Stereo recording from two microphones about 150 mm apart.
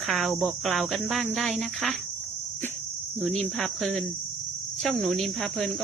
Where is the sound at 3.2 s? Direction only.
Centre (ahead or behind).